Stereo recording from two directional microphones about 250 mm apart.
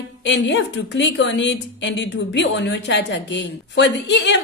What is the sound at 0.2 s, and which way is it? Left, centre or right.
A woman's voice, left.